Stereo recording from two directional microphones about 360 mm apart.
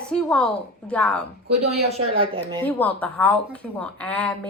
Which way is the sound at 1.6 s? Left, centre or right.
Centre.